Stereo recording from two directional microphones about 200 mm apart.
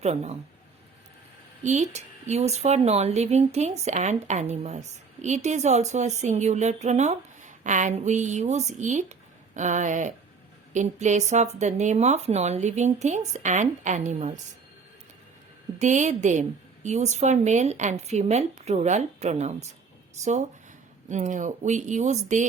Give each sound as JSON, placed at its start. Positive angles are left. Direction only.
{"t": 0.0, "sound": "speech", "side_deg": -35}
{"t": 1.6, "sound": "speech", "side_deg": -35}
{"t": 15.8, "sound": "speech", "side_deg": -35}